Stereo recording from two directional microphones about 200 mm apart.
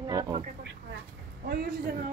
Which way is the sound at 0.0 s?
20° right (ahead or behind).